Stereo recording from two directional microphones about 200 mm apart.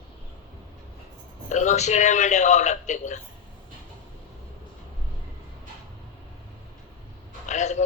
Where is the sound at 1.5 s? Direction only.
35° left (ahead or behind).